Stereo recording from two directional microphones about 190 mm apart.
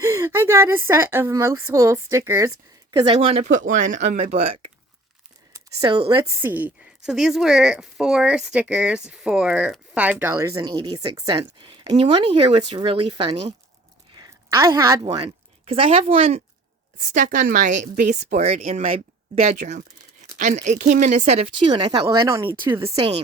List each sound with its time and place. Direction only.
0.0 s speech: 15° right (ahead or behind)
2.9 s speech: 25° right (ahead or behind)
3.7 s a woman's voice: 40° right (ahead or behind); by 6.3 s 25° right (ahead or behind)
6.4 s a woman's voice: 10° right (ahead or behind); by 16.4 s 30° right (ahead or behind)
17.0 s a woman's voice: 40° right (ahead or behind); by 23.2 s 25° right (ahead or behind)